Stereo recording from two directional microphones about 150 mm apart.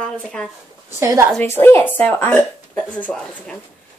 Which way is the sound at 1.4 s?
15° left (ahead or behind).